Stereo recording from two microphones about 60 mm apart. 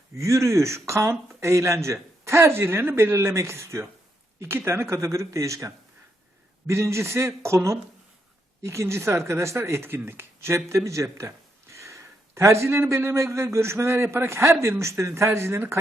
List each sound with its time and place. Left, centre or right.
0.2 s speech: right
4.4 s speech: right